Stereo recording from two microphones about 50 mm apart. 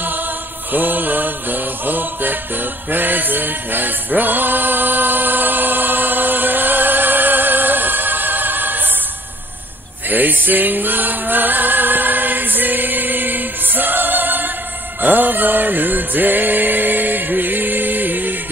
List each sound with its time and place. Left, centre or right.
0.7 s mantra: right
4.1 s choir: right
10.0 s music: right